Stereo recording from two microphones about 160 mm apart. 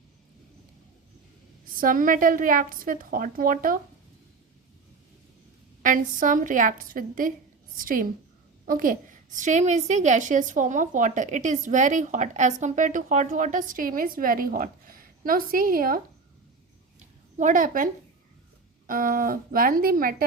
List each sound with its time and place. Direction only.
1.7 s a woman's voice: 60° right (ahead or behind)
5.8 s a woman's voice: 55° right (ahead or behind)
17.3 s a woman's voice: 50° right (ahead or behind)
18.9 s a woman's voice: 60° right (ahead or behind)